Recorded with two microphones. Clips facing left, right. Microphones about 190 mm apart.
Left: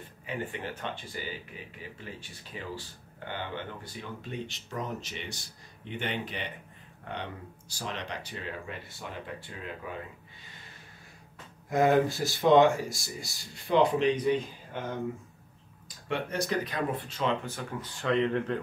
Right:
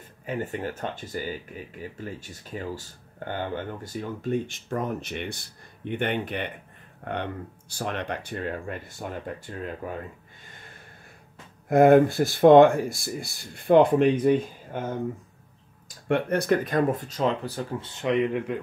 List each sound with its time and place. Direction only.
0.0 s speech: 45° right (ahead or behind)
11.7 s speech: 55° right (ahead or behind)
16.1 s speech: 60° right (ahead or behind); by 18.6 s 15° right (ahead or behind)